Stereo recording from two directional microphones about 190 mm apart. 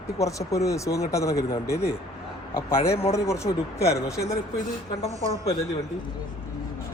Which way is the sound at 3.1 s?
15° left (ahead or behind).